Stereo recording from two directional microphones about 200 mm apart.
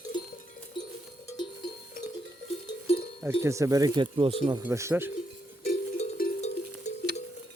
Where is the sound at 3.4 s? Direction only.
15° right (ahead or behind).